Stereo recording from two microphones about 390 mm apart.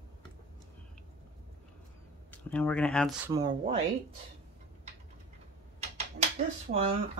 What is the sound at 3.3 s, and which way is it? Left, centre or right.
Speech, centre.